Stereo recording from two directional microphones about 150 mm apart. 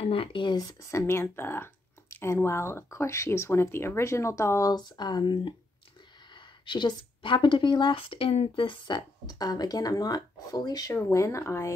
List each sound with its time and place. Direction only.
0.1 s speech: 35° left (ahead or behind)
6.6 s speech: 30° left (ahead or behind)